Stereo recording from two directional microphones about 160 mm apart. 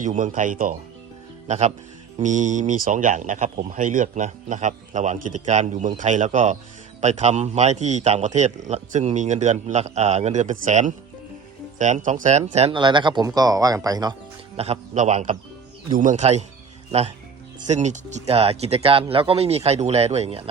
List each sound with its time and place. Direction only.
0.0 s speech: 50° right (ahead or behind)
1.5 s speech: 45° right (ahead or behind)
12.7 s speech: 30° right (ahead or behind)
14.5 s speech: 40° right (ahead or behind)
17.7 s speech: 50° right (ahead or behind)